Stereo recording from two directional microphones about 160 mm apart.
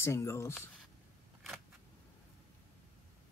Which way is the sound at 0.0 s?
15° left (ahead or behind).